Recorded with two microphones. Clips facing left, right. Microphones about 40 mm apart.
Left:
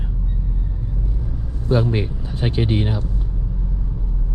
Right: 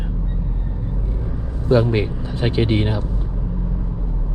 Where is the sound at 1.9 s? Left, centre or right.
Right.